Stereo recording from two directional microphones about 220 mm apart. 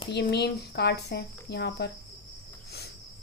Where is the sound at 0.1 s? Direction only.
50° left (ahead or behind).